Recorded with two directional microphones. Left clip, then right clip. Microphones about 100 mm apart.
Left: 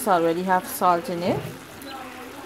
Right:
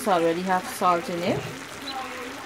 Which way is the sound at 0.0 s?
20° left (ahead or behind).